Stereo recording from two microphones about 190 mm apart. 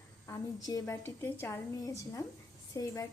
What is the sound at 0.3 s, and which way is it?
A woman's voice, 20° left (ahead or behind).